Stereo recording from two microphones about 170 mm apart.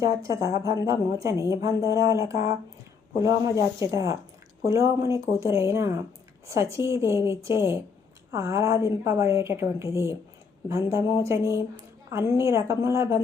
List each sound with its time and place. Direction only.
0.0 s a woman's voice: 20° right (ahead or behind)